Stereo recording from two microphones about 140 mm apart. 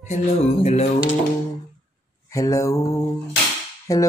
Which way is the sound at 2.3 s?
20° left (ahead or behind).